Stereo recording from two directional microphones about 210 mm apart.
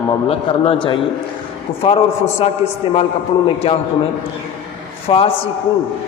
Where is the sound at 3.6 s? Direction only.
25° left (ahead or behind).